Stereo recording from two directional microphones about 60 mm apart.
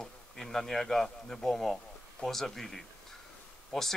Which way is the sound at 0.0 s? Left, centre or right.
Centre.